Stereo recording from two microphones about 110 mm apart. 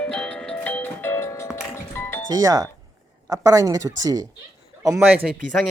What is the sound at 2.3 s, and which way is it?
Speech, 35° right (ahead or behind).